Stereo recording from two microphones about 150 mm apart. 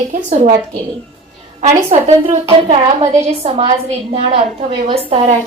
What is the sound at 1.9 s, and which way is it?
A woman's voice, 45° right (ahead or behind).